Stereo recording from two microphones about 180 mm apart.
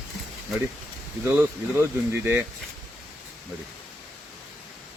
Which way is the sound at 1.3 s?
10° right (ahead or behind).